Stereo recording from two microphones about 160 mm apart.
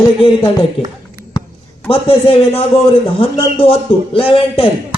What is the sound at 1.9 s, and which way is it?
A man's voice, 35° left (ahead or behind).